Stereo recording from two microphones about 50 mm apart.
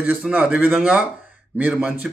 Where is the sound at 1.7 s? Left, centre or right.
Centre.